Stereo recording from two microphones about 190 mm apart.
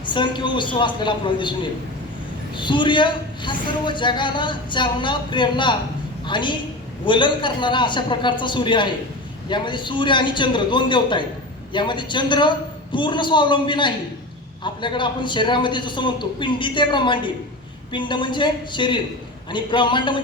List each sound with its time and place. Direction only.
0.0 s a woman's voice: 25° left (ahead or behind)
2.6 s a woman's voice: 25° left (ahead or behind)